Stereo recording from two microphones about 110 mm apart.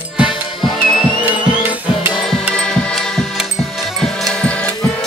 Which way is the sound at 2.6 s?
10° left (ahead or behind).